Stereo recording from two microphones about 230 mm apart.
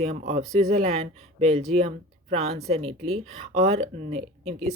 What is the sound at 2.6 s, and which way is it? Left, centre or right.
Speech, right.